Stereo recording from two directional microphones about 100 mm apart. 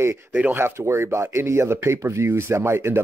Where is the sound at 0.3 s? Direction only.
15° right (ahead or behind).